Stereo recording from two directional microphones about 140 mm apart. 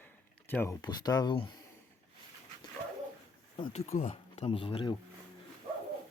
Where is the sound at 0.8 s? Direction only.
30° left (ahead or behind).